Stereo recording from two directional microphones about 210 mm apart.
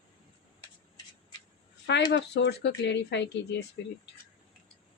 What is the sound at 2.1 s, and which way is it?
Speech, 55° left (ahead or behind).